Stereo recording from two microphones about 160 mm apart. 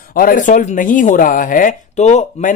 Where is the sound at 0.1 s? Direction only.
60° left (ahead or behind).